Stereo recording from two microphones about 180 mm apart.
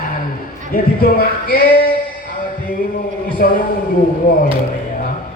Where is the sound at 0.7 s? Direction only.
55° left (ahead or behind).